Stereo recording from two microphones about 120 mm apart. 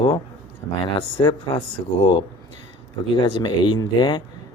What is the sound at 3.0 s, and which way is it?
Speech, 40° left (ahead or behind).